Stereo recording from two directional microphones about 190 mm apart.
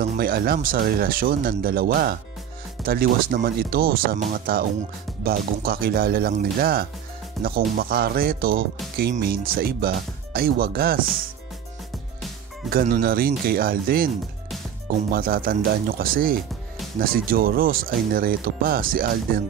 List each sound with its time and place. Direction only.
0.2 s speech: 50° right (ahead or behind)
12.7 s speech: 50° right (ahead or behind)
15.1 s speech: 50° right (ahead or behind)